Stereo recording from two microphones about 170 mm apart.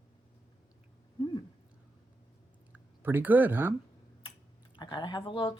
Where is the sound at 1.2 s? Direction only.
30° left (ahead or behind).